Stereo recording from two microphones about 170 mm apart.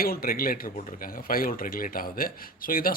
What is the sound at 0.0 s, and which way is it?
A man's voice, 60° left (ahead or behind).